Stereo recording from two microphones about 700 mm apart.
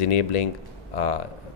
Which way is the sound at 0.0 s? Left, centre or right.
Left.